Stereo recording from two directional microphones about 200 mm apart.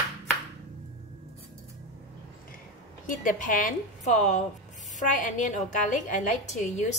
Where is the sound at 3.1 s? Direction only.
40° left (ahead or behind).